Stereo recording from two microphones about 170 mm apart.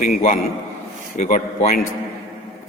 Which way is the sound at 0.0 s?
55° left (ahead or behind).